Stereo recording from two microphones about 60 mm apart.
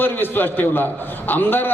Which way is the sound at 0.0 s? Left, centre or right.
Left.